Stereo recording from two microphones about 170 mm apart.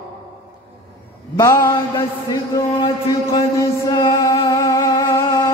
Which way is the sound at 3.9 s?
25° left (ahead or behind).